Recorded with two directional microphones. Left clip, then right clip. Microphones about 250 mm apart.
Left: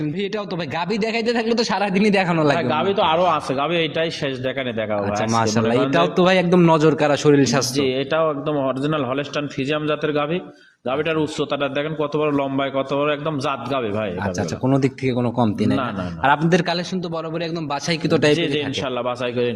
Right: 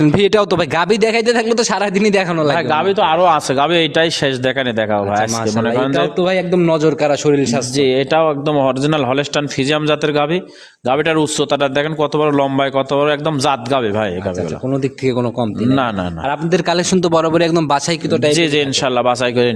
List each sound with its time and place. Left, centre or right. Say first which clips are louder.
0.0 s a man's voice: right 13 dB; right
2.3 s a man's voice: right 3 dB; centre
2.6 s a man's voice: right 5 dB; right
5.9 s a man's voice: right 1 dB; centre
7.8 s a man's voice: right 10 dB; right
16.6 s a man's voice: right 9 dB; right
18.1 s a man's voice: right 2 dB; centre
18.3 s a man's voice: right 7 dB; right